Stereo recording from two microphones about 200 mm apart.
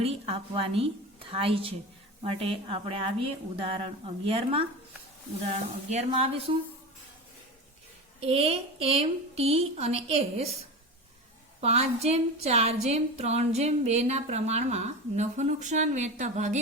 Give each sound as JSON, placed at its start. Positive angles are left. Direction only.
{"t": 0.0, "sound": "speech", "side_deg": -30}
{"t": 5.9, "sound": "speech", "side_deg": -30}
{"t": 8.2, "sound": "a woman's voice", "side_deg": -30}
{"t": 11.6, "sound": "a woman's voice", "side_deg": -30}